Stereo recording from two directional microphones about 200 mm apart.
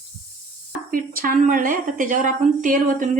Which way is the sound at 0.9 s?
45° right (ahead or behind).